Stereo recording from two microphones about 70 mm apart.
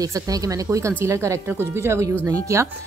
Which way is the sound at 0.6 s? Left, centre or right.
Right.